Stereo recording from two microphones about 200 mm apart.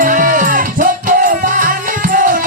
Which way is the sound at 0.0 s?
45° right (ahead or behind).